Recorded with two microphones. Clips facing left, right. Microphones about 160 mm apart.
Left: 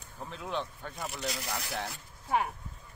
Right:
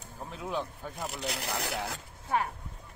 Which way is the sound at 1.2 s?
70° right (ahead or behind).